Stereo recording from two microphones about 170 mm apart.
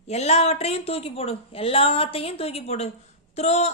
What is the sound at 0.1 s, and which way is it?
Speech, 40° left (ahead or behind).